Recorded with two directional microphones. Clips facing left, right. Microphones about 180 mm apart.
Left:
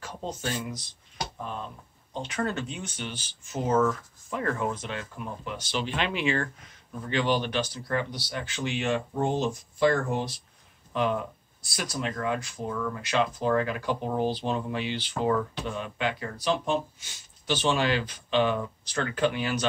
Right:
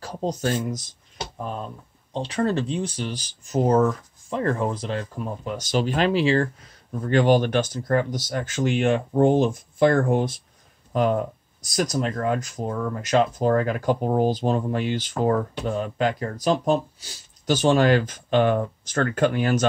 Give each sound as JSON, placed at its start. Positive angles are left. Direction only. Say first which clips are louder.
{"t": 0.0, "sound": "speech", "louder": "right 8 dB", "side_deg": -40}
{"t": 2.1, "sound": "speech", "louder": "right 7 dB", "side_deg": -30}